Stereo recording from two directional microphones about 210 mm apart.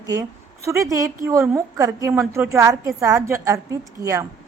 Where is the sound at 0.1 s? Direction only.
15° right (ahead or behind).